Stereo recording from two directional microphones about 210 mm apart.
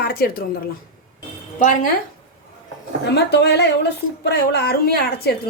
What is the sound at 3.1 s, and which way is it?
A woman's voice, 50° left (ahead or behind).